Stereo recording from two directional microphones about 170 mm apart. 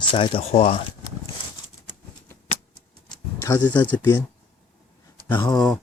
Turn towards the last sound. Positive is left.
turn(degrees=10)  # may be behind; listen again after turning